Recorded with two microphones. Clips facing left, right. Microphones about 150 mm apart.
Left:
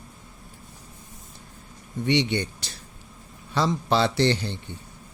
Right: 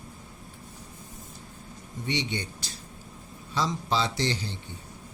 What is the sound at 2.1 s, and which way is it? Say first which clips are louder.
Speech: left 8 dB; 65° left (ahead or behind).